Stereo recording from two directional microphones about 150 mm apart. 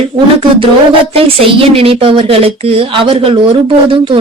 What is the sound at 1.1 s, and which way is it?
A woman's voice, 40° right (ahead or behind).